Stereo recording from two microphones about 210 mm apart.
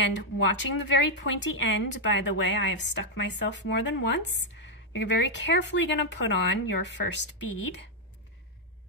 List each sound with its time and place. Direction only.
0.0 s speech: 60° left (ahead or behind)